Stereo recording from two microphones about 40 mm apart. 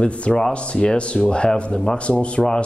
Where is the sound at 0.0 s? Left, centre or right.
Left.